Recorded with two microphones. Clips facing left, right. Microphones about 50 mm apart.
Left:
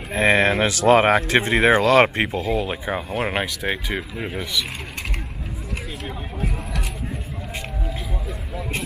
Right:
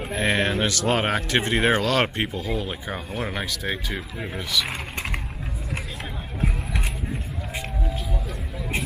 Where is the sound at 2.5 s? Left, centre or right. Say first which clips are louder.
Left 5 dB; left.